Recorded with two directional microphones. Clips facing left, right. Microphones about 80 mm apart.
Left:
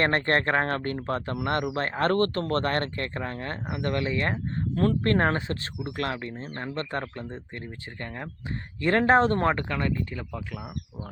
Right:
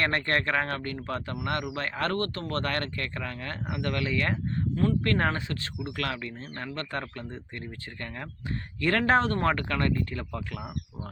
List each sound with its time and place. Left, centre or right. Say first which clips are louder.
0.0 s speech: left 3 dB; left
4.7 s speech: left 2 dB; left
5.0 s speech: left 3 dB; left
9.6 s speech: right 1 dB; centre